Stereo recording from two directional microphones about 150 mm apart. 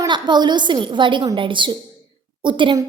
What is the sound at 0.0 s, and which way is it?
A woman's voice, 30° right (ahead or behind).